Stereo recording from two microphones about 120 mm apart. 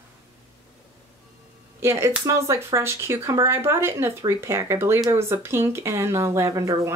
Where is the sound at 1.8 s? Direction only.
20° right (ahead or behind).